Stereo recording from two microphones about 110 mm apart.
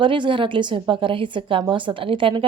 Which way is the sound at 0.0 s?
50° right (ahead or behind).